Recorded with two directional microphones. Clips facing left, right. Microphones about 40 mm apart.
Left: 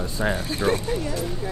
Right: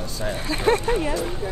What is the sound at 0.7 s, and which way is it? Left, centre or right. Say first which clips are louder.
Speech: right 7 dB; right.